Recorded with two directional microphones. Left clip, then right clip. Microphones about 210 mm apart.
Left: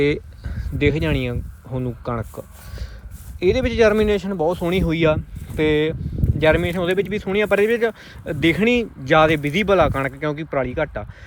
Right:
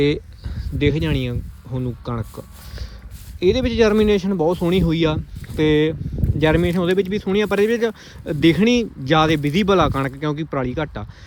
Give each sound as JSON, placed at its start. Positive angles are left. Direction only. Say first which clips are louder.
{"t": 0.0, "sound": "a sound", "louder": "even", "side_deg": -15}
{"t": 0.8, "sound": "speech", "louder": "left 1 dB", "side_deg": -15}
{"t": 3.4, "sound": "speech", "louder": "even", "side_deg": -20}